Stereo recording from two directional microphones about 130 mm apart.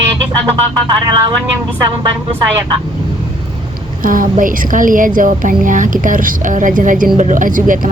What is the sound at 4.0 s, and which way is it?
Speech, 90° right.